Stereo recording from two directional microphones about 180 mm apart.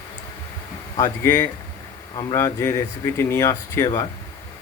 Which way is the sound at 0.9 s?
15° left (ahead or behind).